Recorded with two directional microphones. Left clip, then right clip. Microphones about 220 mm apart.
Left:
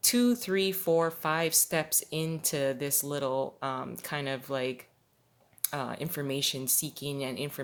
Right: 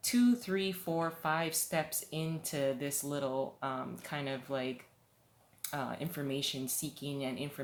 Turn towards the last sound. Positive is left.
turn(degrees=50)  # may be behind; listen again after turning